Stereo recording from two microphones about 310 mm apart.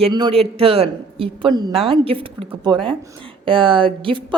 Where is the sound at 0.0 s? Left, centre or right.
Centre.